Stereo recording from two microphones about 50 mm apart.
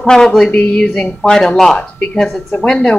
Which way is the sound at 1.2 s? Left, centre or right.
Centre.